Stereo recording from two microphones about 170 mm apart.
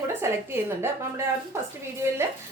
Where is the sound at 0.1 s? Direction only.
15° right (ahead or behind).